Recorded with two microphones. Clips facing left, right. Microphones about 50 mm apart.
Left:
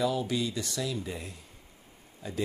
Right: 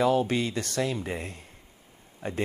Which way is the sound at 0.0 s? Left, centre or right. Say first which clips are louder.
Right 5 dB; right.